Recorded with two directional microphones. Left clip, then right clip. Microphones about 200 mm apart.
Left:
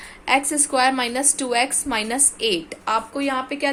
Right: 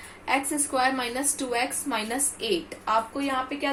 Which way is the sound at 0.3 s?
45° left (ahead or behind).